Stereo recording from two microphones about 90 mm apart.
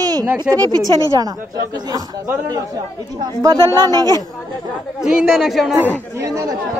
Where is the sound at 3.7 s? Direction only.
40° right (ahead or behind).